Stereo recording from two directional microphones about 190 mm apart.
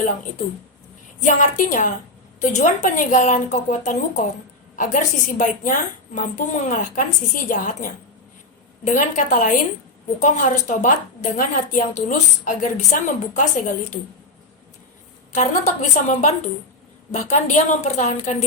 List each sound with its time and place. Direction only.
1.2 s a woman's voice: 40° left (ahead or behind)
15.3 s a woman's voice: 40° left (ahead or behind)